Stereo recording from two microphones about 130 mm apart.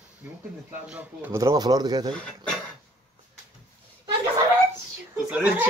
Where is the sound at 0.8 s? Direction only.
5° right (ahead or behind).